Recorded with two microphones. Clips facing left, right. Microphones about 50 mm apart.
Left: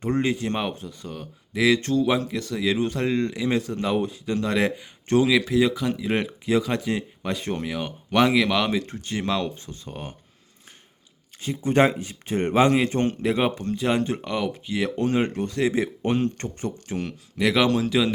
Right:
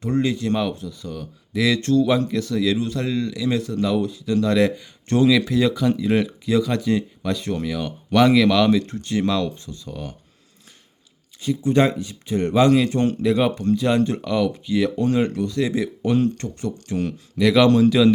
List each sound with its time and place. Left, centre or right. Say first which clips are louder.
0.0 s speech: right 2 dB; left
1.5 s speech: right 2 dB; centre
2.7 s speech: even; left; by 6.1 s centre
6.1 s speech: right 3 dB; left
9.6 s speech: right 3 dB; left
11.3 s speech: right 2 dB; left; by 15.4 s centre
15.4 s speech: right 1 dB; left; by 18.1 s centre